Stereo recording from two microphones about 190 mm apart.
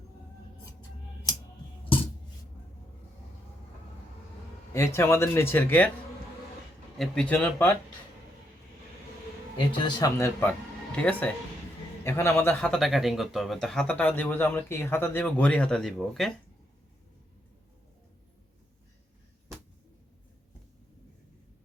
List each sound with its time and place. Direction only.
1.9 s a sound: 30° left (ahead or behind)
4.7 s speech: 15° left (ahead or behind)
7.0 s speech: 5° left (ahead or behind)
9.8 s speech: 15° left (ahead or behind); by 16.3 s centre (ahead or behind)